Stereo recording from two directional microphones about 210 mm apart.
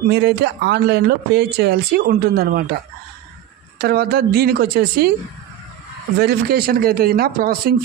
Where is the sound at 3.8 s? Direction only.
45° right (ahead or behind).